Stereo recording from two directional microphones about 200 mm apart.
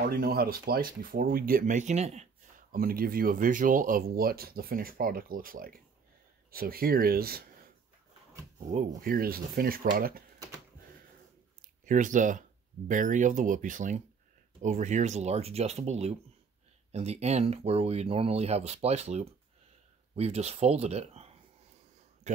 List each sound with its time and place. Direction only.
0.0 s speech: 45° right (ahead or behind)
2.7 s speech: 45° right (ahead or behind)
8.5 s speech: 35° right (ahead or behind)
11.8 s speech: 40° right (ahead or behind)